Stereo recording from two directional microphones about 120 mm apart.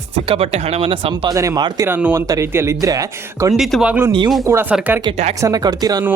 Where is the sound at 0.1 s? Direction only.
55° right (ahead or behind).